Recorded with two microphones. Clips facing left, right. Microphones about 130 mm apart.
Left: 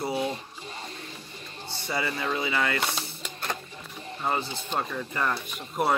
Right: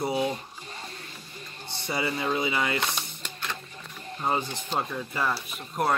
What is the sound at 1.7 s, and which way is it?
Speech, 20° right (ahead or behind).